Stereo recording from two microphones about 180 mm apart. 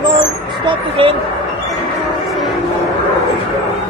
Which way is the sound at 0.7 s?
30° right (ahead or behind).